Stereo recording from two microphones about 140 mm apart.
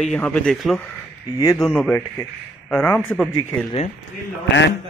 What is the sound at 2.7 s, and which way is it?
Speech, 15° left (ahead or behind).